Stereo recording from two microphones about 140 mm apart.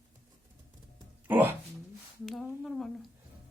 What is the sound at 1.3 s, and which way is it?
Speech, 10° right (ahead or behind).